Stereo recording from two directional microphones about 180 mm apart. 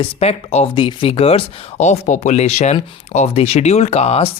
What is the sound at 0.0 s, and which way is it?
Speech, 35° left (ahead or behind).